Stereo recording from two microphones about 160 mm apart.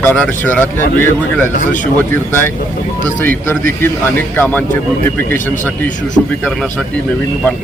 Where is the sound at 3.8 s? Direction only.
15° left (ahead or behind).